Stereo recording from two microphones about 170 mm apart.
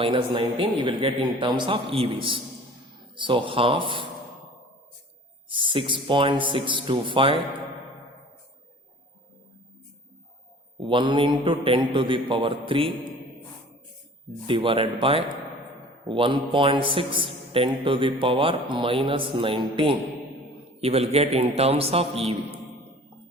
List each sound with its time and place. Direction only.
0.0 s a man's voice: 30° right (ahead or behind)
5.5 s a man's voice: 30° right (ahead or behind)
10.8 s a man's voice: 30° right (ahead or behind)
14.4 s a man's voice: 30° right (ahead or behind)